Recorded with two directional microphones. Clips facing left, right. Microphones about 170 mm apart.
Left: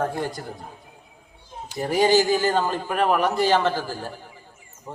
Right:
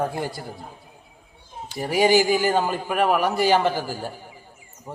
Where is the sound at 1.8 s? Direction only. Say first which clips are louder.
Even; 10° right (ahead or behind).